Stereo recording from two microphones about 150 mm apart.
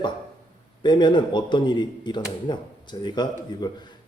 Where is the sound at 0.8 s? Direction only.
30° left (ahead or behind).